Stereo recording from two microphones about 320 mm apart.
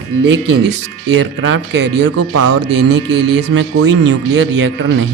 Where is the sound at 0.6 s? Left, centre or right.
Right.